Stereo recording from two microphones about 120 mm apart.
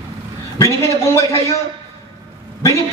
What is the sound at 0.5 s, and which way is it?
A man's voice, 25° left (ahead or behind).